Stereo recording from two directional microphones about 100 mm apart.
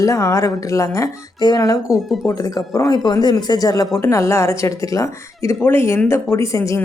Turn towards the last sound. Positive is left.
turn(degrees=30)  # may be behind; listen again after turning